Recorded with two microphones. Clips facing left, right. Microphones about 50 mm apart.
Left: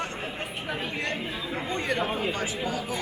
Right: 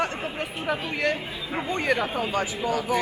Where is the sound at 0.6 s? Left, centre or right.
Right.